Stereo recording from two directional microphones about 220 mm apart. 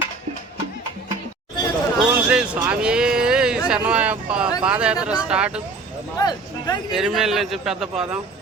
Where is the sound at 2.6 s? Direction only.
5° right (ahead or behind).